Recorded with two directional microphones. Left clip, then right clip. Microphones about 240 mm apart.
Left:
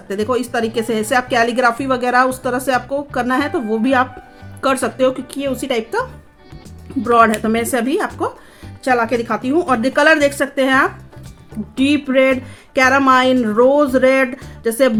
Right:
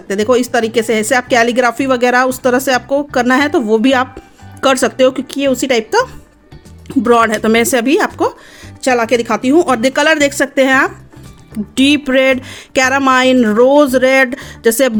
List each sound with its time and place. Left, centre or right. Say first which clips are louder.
0.1 s speech: right 6 dB; right